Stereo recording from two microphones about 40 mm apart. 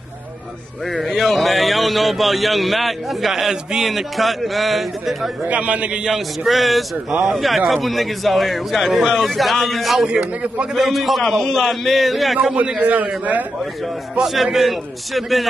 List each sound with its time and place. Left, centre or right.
0.9 s speech: centre
5.4 s a man's voice: right
6.0 s speech: centre
12.5 s a man's voice: right
12.9 s a man's voice: right
14.2 s speech: centre